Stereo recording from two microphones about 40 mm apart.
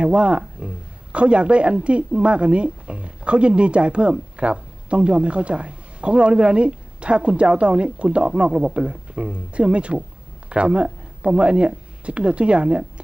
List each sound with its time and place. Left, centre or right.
0.0 s speech: right